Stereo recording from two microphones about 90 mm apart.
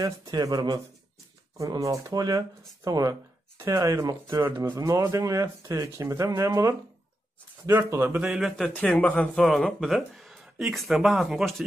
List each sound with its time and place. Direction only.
0.0 s speech: 45° right (ahead or behind)
4.4 s speech: 25° right (ahead or behind)
4.7 s speech: 35° right (ahead or behind)
7.9 s speech: 25° right (ahead or behind)
8.2 s speech: 5° right (ahead or behind)
8.5 s speech: 10° left (ahead or behind)